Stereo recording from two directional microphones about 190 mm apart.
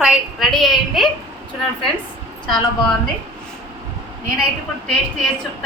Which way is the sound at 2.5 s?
5° left (ahead or behind).